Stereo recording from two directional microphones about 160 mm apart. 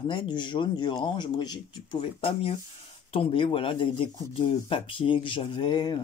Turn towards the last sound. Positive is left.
turn(degrees=30)  # may be behind; listen again after turning